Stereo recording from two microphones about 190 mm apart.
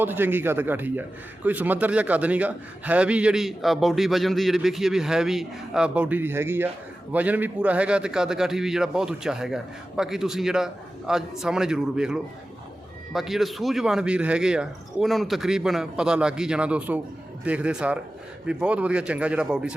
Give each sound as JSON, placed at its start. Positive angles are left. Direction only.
{"t": 0.0, "sound": "a man's voice", "side_deg": -10}